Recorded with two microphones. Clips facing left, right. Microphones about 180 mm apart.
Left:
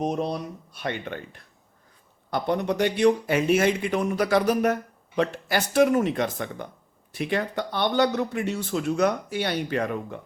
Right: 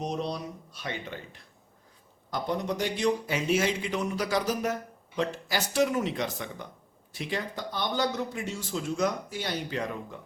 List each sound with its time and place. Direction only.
0.0 s speech: 55° left (ahead or behind)